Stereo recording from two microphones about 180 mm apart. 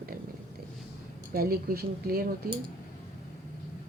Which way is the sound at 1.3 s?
55° right (ahead or behind).